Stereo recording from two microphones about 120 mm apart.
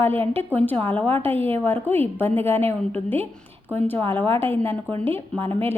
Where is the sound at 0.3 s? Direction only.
15° left (ahead or behind).